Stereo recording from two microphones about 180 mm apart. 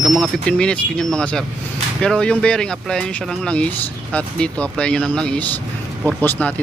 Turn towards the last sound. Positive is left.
turn(degrees=10)  # may be behind; listen again after turning